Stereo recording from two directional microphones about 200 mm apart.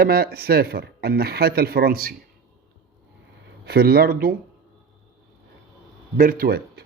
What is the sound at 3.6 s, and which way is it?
Speech, 50° right (ahead or behind).